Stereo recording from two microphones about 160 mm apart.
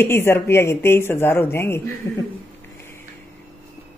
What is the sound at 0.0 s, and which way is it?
Speech, 15° left (ahead or behind).